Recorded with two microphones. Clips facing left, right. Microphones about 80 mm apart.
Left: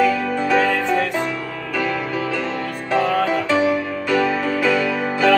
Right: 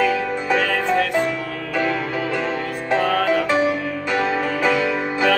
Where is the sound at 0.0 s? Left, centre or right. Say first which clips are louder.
Left 2 dB; right.